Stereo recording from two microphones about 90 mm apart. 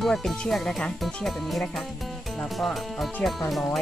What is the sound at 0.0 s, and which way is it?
Speech, centre (ahead or behind).